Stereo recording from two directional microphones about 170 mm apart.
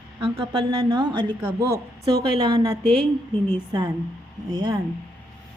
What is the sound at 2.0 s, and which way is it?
Speech, 25° right (ahead or behind).